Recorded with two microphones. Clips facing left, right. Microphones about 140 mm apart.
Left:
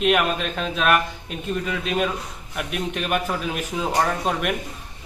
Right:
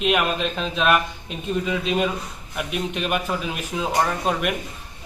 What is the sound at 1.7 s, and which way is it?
A man's voice, 15° right (ahead or behind).